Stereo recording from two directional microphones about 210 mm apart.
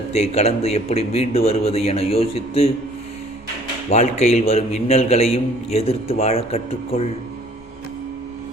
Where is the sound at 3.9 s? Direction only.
30° left (ahead or behind).